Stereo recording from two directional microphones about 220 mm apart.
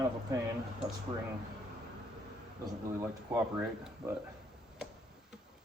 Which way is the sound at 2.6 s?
15° right (ahead or behind).